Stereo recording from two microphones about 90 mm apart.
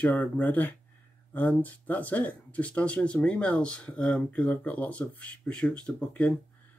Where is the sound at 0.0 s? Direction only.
15° left (ahead or behind).